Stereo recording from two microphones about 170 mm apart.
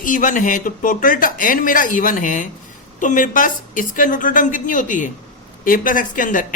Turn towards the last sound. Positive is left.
turn(degrees=50)  # may be behind; listen again after turning